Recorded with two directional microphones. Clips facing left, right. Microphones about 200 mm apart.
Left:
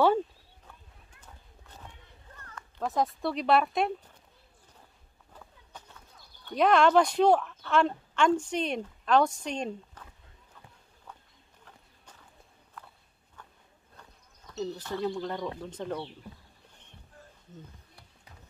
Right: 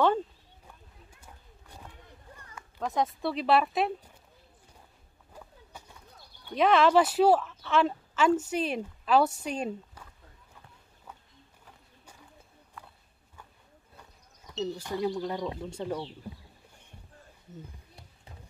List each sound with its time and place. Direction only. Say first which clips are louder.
2.3 s a sound: left 2 dB; 10° right (ahead or behind)
2.8 s speech: even; centre (ahead or behind)
5.3 s clip-clop: right 2 dB; 10° right (ahead or behind)
6.5 s speech: even; centre (ahead or behind)
11.1 s a sound: even; 5° right (ahead or behind)
11.6 s walk: left 1 dB; 10° right (ahead or behind)
14.6 s speech: right 1 dB; 10° right (ahead or behind)
15.4 s speech: right 1 dB; 20° right (ahead or behind)